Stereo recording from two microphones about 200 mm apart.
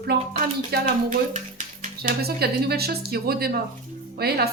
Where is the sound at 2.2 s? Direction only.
50° right (ahead or behind).